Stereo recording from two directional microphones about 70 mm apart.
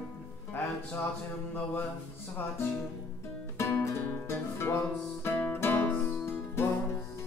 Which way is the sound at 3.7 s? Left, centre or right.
Left.